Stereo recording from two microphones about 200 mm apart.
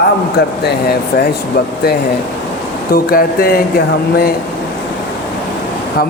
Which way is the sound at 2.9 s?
50° left (ahead or behind).